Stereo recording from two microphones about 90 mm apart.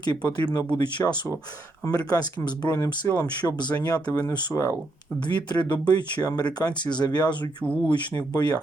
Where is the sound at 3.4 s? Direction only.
55° left (ahead or behind).